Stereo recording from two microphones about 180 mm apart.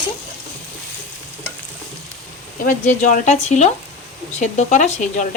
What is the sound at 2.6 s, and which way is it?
Speech, 45° left (ahead or behind).